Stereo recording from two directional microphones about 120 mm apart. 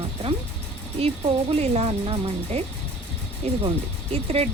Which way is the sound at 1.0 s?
55° right (ahead or behind).